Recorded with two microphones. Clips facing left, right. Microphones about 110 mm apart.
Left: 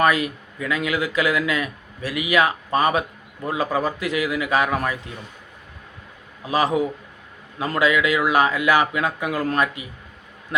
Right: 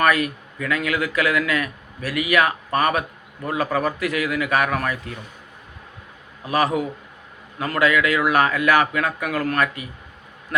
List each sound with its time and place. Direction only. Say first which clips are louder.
0.0 s speech: even; 20° left (ahead or behind)
6.4 s speech: left 1 dB; 20° left (ahead or behind)